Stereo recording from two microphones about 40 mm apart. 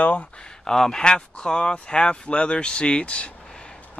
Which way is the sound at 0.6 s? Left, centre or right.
Centre.